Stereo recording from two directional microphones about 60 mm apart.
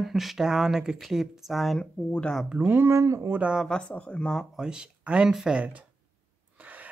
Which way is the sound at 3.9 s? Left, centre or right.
Left.